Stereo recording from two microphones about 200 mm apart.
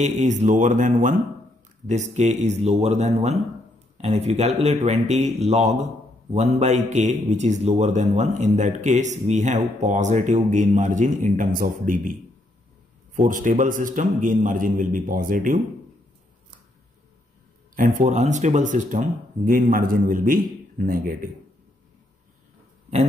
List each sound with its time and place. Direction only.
0.0 s a man's voice: 35° right (ahead or behind)
13.1 s a man's voice: 40° right (ahead or behind)
17.7 s a man's voice: 40° right (ahead or behind)